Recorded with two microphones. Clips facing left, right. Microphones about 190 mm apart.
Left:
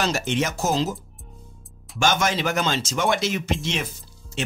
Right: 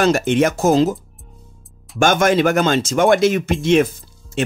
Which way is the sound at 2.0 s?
55° right (ahead or behind).